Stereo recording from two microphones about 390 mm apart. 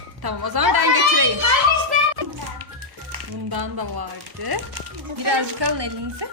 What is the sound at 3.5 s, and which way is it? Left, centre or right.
A woman's voice, right.